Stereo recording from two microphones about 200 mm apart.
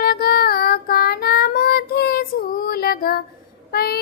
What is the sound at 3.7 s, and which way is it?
Speech, 50° left (ahead or behind).